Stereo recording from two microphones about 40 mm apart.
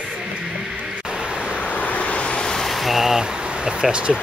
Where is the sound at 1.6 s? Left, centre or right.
Left.